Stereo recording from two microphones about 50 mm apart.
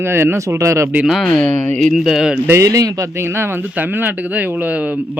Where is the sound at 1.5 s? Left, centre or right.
Left.